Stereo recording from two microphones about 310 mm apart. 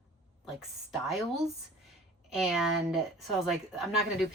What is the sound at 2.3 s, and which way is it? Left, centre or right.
Speech, centre.